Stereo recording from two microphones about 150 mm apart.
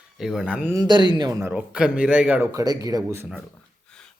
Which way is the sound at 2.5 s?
25° right (ahead or behind).